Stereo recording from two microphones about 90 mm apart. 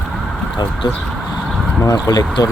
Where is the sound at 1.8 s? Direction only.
40° left (ahead or behind).